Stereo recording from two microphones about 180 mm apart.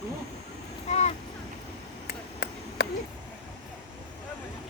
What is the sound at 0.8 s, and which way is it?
Speech, 35° left (ahead or behind).